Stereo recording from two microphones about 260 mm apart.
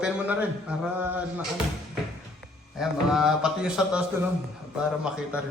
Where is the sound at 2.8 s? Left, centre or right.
Centre.